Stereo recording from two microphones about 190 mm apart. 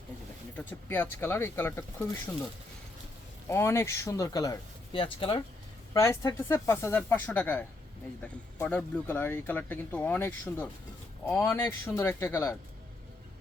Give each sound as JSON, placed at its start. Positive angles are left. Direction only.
{"t": 0.5, "sound": "speech", "side_deg": 10}
{"t": 3.5, "sound": "speech", "side_deg": 15}
{"t": 5.9, "sound": "speech", "side_deg": 15}